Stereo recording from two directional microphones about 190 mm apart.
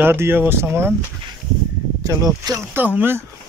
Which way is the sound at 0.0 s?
10° right (ahead or behind).